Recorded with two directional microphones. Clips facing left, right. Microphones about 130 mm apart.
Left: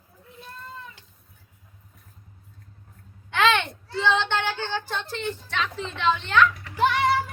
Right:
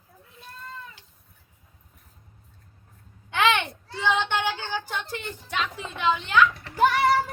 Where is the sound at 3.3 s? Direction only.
15° right (ahead or behind).